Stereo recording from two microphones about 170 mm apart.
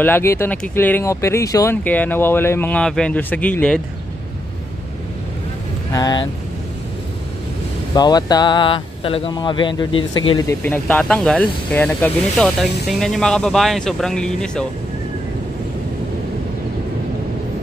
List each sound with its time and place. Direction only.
0.0 s speech: 15° left (ahead or behind)
5.9 s speech: 25° left (ahead or behind)
7.9 s speech: 25° left (ahead or behind)
10.6 s speech: 10° left (ahead or behind)